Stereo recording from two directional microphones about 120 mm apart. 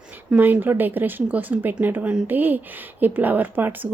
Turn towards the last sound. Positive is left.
turn(degrees=-15)  # may be behind; listen again after turning